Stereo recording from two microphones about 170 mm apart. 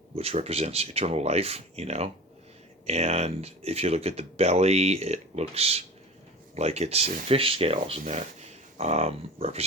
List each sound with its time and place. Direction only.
0.2 s speech: 35° right (ahead or behind)